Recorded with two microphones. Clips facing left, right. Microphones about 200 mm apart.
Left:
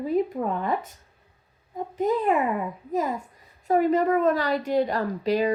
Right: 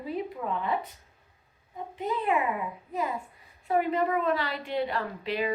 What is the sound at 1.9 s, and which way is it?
Speech, 45° left (ahead or behind).